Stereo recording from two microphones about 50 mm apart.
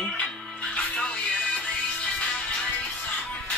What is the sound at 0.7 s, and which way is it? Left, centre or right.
Music, left.